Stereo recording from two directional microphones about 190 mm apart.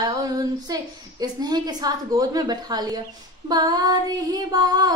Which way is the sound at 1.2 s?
20° right (ahead or behind).